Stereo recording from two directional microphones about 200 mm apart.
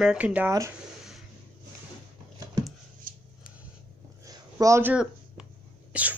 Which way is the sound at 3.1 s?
45° right (ahead or behind).